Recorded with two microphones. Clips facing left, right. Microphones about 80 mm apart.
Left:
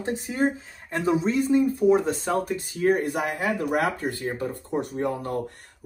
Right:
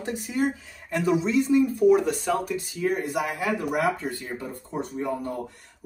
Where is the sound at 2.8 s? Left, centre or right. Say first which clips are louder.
Left 4 dB; left.